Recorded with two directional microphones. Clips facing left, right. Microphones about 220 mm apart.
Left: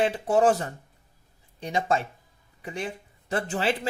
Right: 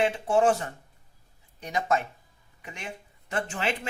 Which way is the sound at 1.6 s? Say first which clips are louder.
Left 1 dB; 30° left (ahead or behind).